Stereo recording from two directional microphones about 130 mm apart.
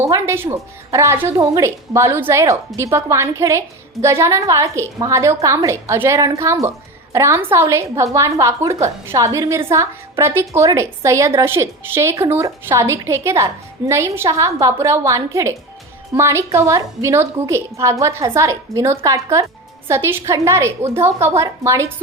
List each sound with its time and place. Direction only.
0.0 s a woman's voice: 20° right (ahead or behind)